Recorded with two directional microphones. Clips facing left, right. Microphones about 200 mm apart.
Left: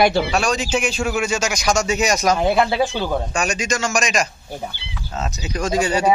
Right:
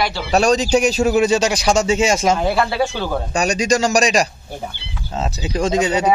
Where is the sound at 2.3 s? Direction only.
15° left (ahead or behind).